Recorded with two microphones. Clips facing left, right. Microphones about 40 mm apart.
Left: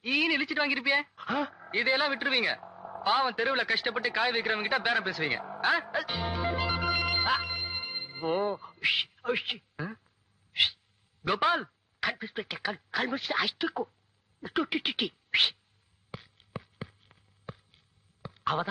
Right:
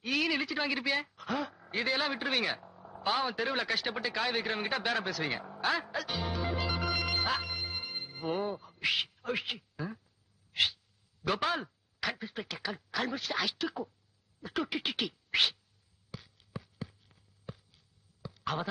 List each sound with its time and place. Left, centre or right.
0.0 s speech: left
2.6 s a sound: left
8.8 s speech: left
10.5 s sneeze: centre
11.2 s speech: centre
16.1 s a sound: left